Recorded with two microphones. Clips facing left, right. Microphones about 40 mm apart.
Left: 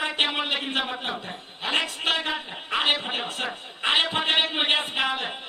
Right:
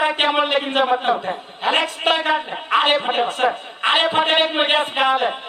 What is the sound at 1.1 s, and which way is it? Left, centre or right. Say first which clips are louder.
Speech: right 11 dB; right.